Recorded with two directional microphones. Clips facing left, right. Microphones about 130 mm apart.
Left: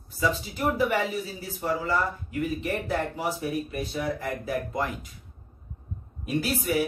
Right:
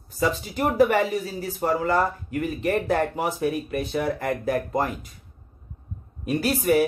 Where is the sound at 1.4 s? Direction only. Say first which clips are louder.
Right 5 dB; 45° right (ahead or behind).